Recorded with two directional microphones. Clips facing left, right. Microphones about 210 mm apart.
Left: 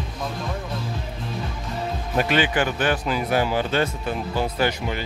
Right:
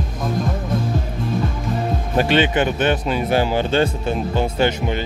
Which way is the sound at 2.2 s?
25° right (ahead or behind).